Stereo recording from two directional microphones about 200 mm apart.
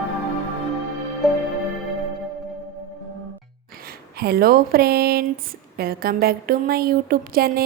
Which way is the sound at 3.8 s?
50° right (ahead or behind).